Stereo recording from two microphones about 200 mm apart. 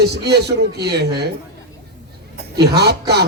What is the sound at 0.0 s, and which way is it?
Speech, 55° right (ahead or behind).